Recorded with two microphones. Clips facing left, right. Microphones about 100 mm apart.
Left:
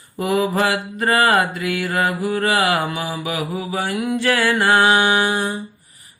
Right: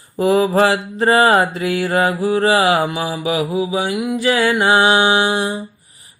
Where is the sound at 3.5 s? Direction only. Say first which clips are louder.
Right 5 dB; 15° right (ahead or behind).